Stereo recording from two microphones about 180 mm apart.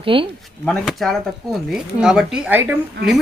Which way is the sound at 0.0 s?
30° right (ahead or behind).